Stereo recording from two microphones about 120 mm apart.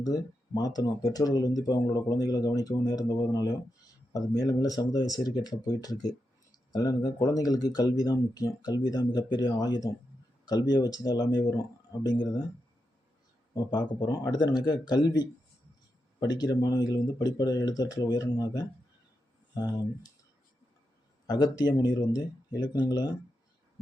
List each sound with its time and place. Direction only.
0.0 s speech: 30° left (ahead or behind)
13.5 s speech: 35° left (ahead or behind)
21.2 s speech: 35° left (ahead or behind)